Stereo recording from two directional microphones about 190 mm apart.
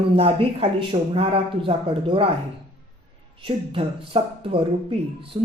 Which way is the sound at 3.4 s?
30° right (ahead or behind).